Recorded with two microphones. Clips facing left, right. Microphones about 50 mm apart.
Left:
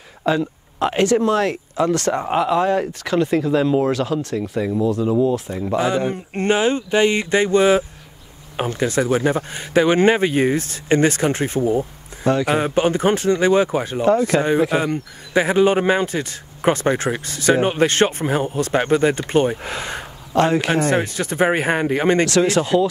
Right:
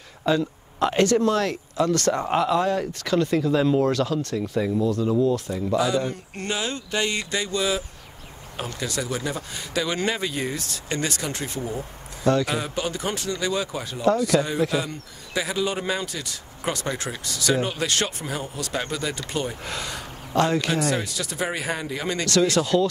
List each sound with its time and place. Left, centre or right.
0.2 s speech: centre
2.9 s speech: centre
12.5 s speech: left